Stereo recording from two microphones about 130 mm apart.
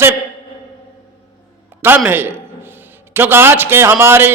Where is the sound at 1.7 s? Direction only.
15° right (ahead or behind).